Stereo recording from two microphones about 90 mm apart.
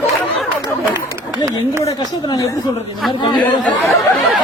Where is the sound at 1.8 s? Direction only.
50° left (ahead or behind).